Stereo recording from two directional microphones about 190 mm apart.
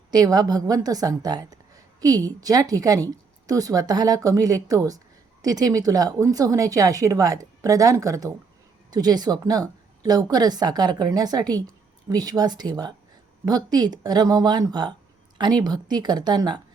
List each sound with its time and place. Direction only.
0.1 s a woman's voice: 20° right (ahead or behind)